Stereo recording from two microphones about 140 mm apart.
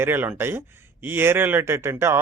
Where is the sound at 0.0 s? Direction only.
15° right (ahead or behind).